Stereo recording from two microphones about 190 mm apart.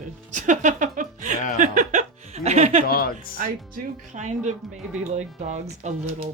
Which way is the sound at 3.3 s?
45° right (ahead or behind).